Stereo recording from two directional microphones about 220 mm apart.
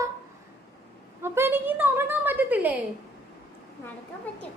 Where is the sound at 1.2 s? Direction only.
10° right (ahead or behind).